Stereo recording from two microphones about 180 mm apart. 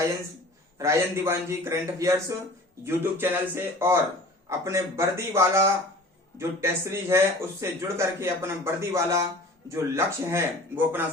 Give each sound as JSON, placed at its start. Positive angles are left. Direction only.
{"t": 0.8, "sound": "speech", "side_deg": -15}